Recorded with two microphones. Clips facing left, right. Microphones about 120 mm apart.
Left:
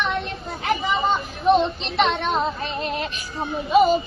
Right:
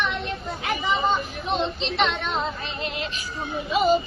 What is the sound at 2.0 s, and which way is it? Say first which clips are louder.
Speech: left 5 dB; 45° left (ahead or behind).